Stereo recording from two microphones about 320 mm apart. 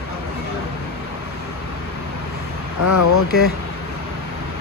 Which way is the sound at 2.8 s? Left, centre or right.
Left.